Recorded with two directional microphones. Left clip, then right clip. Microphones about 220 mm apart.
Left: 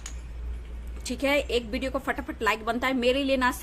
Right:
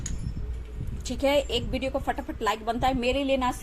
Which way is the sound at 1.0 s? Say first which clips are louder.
Right 1 dB; 15° left (ahead or behind).